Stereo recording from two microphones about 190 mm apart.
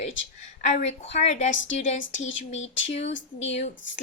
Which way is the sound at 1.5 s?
85° left.